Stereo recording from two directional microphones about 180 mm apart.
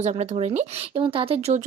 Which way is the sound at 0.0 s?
40° right (ahead or behind).